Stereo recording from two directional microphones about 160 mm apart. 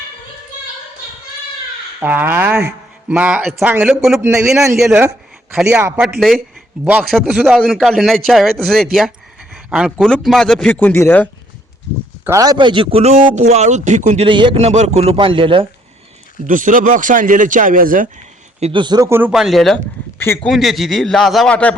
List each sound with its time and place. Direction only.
2.0 s a man's voice: 10° right (ahead or behind)
5.6 s speech: 15° right (ahead or behind)
6.1 s a man's voice: centre (ahead or behind)
12.2 s a man's voice: 20° right (ahead or behind); by 14.3 s 50° right (ahead or behind)
14.3 s a man's voice: 30° right (ahead or behind)
16.5 s speech: 55° right (ahead or behind)
18.6 s speech: 30° right (ahead or behind)
19.3 s a man's voice: centre (ahead or behind)
20.1 s speech: 15° left (ahead or behind)
20.5 s a man's voice: centre (ahead or behind)